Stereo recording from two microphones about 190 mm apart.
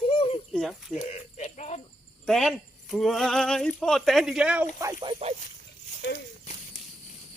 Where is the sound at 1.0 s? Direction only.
35° left (ahead or behind).